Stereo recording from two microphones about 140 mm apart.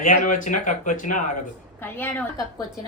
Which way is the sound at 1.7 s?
15° left (ahead or behind).